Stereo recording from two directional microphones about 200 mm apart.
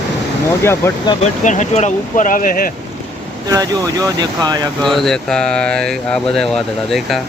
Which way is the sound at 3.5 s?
15° right (ahead or behind).